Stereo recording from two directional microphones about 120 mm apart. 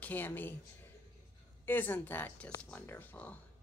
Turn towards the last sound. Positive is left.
turn(degrees=15)  # may be behind; listen again after turning